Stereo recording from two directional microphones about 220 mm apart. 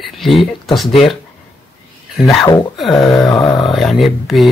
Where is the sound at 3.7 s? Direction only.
Centre (ahead or behind).